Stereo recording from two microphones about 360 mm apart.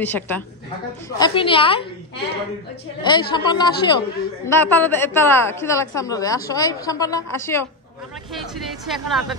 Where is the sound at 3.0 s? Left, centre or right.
Centre.